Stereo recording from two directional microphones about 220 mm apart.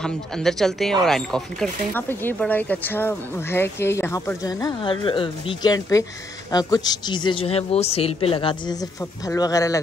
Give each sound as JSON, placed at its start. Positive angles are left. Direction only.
{"t": 0.0, "sound": "a woman's voice", "side_deg": 0}